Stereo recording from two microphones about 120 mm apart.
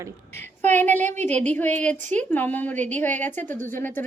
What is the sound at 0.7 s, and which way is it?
A woman's voice, 15° left (ahead or behind).